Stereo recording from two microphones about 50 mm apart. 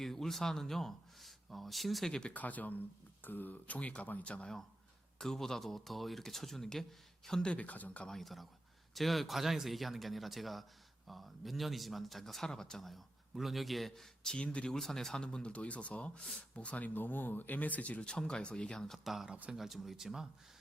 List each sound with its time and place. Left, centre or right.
0.0 s speech: centre
2.0 s speech: centre
2.3 s speech: left
5.2 s speech: centre
7.4 s speech: left
8.0 s speech: centre
14.3 s speech: left
14.7 s speech: centre
18.9 s speech: centre